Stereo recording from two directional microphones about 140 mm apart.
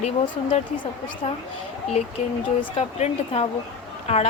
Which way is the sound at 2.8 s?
50° left (ahead or behind).